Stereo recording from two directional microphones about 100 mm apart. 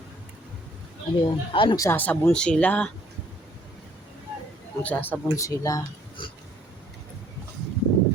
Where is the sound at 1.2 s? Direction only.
55° left (ahead or behind).